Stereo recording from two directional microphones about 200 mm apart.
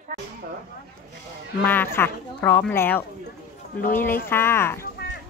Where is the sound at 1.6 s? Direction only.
10° left (ahead or behind).